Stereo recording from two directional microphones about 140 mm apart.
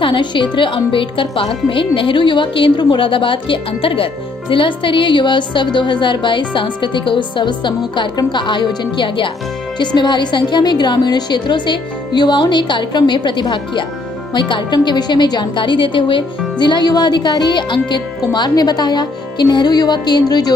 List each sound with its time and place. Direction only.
0.0 s a woman's voice: 35° left (ahead or behind)